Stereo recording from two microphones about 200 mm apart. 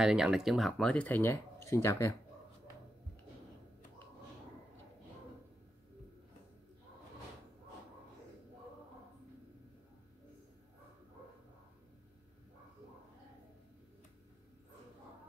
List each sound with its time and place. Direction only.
0.0 s speech: centre (ahead or behind); by 2.1 s 15° left (ahead or behind)